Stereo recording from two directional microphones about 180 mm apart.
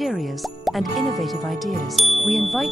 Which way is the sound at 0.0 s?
Centre (ahead or behind).